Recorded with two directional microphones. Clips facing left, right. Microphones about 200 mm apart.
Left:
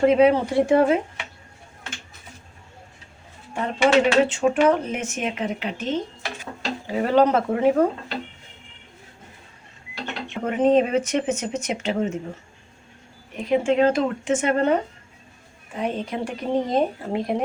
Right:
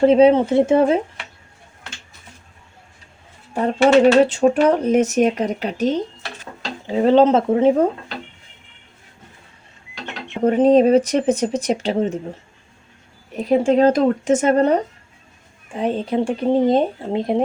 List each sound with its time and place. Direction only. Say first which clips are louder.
0.0 s speech: right 4 dB; 30° right (ahead or behind)
3.5 s speech: right 5 dB; 35° right (ahead or behind)
6.8 s speech: right 5 dB; 25° right (ahead or behind)
10.4 s speech: right 6 dB; 35° right (ahead or behind)
13.3 s speech: right 4 dB; 35° right (ahead or behind)